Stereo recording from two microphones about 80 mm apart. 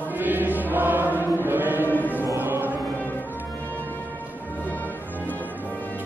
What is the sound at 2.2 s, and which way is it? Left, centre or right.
Choir, right.